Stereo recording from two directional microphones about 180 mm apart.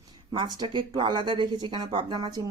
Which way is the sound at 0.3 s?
25° right (ahead or behind).